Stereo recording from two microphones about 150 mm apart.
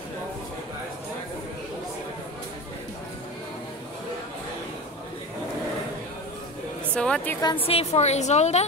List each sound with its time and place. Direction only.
7.0 s a woman's voice: 5° left (ahead or behind)
7.6 s a woman's voice: 45° left (ahead or behind)